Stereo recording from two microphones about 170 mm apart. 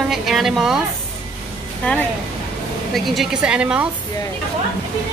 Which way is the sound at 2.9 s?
Centre (ahead or behind).